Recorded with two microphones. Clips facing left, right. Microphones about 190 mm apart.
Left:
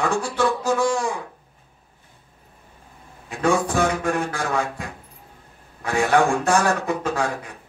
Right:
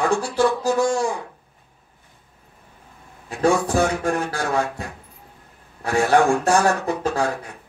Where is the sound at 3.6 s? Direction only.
35° right (ahead or behind).